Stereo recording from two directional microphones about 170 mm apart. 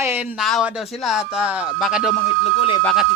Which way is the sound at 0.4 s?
Centre (ahead or behind).